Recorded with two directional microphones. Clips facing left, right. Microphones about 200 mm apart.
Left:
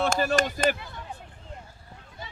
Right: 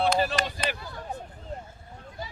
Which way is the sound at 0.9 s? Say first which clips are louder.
Right 4 dB; 40° right (ahead or behind).